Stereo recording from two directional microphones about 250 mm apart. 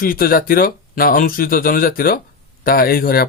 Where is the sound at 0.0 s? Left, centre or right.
Left.